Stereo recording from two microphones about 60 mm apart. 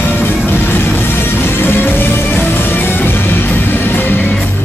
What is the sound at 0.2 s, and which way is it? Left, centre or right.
Music, left.